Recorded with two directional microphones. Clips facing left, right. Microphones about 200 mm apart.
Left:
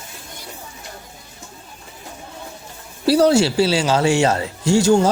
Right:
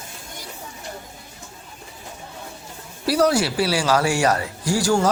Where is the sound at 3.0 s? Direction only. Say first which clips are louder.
Left 5 dB; 30° left (ahead or behind).